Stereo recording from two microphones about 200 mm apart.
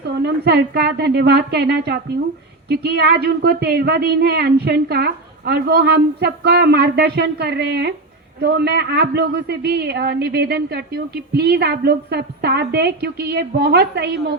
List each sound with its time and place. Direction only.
0.2 s a woman's voice: 55° right (ahead or behind)